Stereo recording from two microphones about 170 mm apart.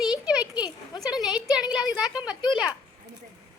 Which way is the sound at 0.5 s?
25° left (ahead or behind).